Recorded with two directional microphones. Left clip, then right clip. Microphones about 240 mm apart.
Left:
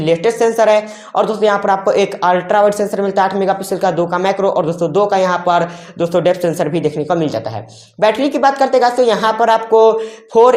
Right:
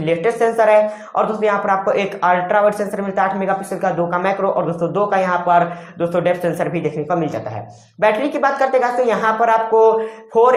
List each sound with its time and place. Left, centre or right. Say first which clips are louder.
0.0 s a woman's voice: left 3 dB; left
8.0 s a woman's voice: left 3 dB; left